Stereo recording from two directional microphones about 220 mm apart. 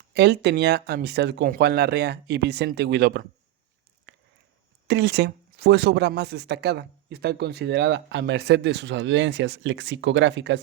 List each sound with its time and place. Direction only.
0.1 s speech: 50° right (ahead or behind)
4.1 s a sound: 55° right (ahead or behind)
4.9 s speech: 50° right (ahead or behind)